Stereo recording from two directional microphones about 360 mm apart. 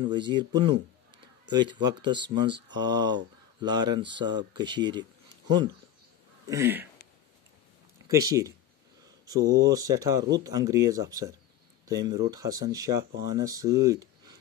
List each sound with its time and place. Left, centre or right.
0.0 s speech: centre
1.1 s a sound: right
1.5 s speech: centre
6.4 s speech: centre
8.3 s speech: centre